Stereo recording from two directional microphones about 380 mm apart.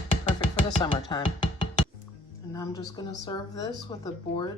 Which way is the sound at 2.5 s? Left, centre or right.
Centre.